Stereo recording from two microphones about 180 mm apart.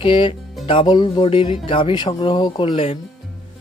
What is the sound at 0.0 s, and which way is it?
Speech, 30° left (ahead or behind).